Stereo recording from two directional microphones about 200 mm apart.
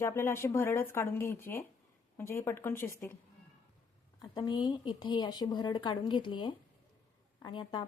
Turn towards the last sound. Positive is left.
turn(degrees=20)  # may be behind; listen again after turning